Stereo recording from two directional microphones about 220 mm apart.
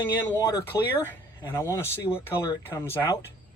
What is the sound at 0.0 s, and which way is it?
Speech, 10° left (ahead or behind).